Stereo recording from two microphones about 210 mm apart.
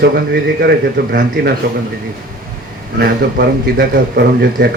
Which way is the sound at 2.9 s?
50° right (ahead or behind).